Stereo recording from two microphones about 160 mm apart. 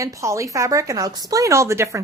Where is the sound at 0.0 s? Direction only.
20° right (ahead or behind).